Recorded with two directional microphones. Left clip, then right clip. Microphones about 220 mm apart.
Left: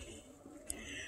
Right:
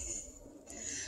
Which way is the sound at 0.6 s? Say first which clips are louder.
Right 2 dB; 25° right (ahead or behind).